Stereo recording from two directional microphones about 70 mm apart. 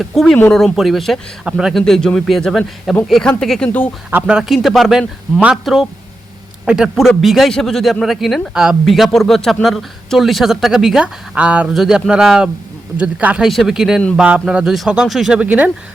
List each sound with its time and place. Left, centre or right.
0.1 s speech: centre
1.7 s speech: centre
3.7 s speech: left
4.3 s speech: centre
7.2 s speech: centre
11.7 s speech: centre
13.4 s speech: centre
14.2 s speech: centre
14.4 s speech: centre
15.3 s speech: centre